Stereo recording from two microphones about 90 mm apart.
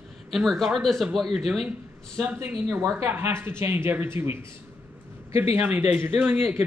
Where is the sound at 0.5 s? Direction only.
Centre (ahead or behind).